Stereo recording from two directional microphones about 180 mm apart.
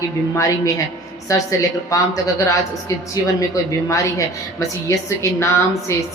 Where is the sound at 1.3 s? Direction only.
20° left (ahead or behind).